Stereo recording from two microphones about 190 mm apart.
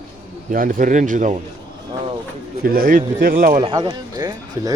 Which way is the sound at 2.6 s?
50° right (ahead or behind).